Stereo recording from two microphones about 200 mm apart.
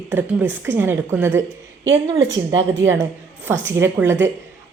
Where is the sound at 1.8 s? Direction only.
65° right (ahead or behind).